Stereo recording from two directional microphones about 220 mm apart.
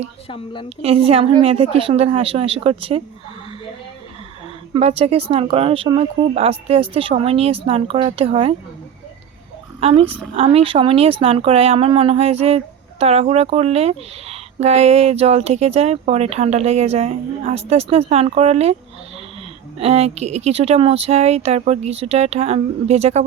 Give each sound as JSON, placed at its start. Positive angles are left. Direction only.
{"t": 0.3, "sound": "a woman's voice", "side_deg": 25}
{"t": 0.8, "sound": "speech", "side_deg": -25}
{"t": 4.7, "sound": "speech", "side_deg": -25}
{"t": 9.8, "sound": "speech", "side_deg": -25}
{"t": 19.8, "sound": "speech", "side_deg": -30}